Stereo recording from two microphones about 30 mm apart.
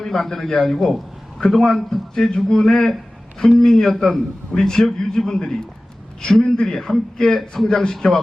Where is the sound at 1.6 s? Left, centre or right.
Centre.